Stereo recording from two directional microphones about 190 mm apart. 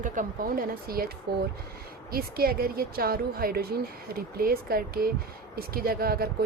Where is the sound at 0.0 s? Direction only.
45° right (ahead or behind).